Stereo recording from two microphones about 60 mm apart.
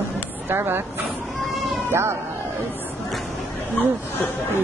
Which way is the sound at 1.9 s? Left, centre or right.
Right.